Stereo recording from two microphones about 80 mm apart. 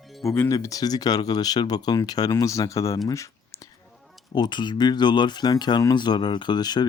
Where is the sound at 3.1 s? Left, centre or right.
Left.